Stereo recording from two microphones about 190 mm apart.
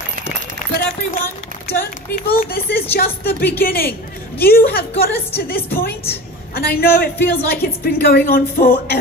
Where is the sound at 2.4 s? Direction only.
50° left (ahead or behind).